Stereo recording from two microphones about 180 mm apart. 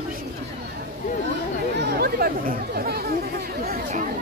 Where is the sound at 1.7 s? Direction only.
65° right (ahead or behind).